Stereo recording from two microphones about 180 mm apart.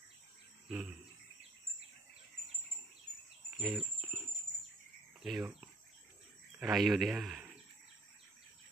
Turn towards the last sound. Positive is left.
turn(degrees=-5)  # may be behind; listen again after turning